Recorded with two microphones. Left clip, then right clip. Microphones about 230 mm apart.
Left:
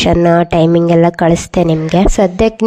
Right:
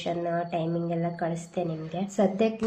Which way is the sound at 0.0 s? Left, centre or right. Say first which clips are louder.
Left 19 dB; left.